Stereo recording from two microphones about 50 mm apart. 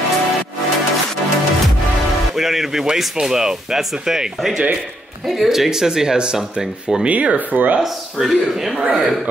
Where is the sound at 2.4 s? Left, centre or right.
Centre.